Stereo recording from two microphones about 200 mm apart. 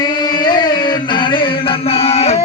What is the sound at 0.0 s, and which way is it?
Music, 20° left (ahead or behind).